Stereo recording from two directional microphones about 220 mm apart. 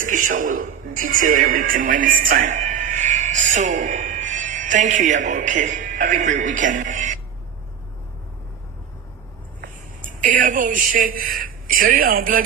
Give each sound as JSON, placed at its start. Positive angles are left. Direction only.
{"t": 0.0, "sound": "speech", "side_deg": -35}
{"t": 10.0, "sound": "a man's voice", "side_deg": -35}